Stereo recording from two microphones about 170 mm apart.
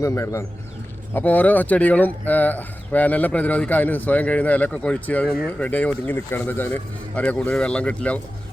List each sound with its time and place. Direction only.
0.0 s speech: 15° left (ahead or behind)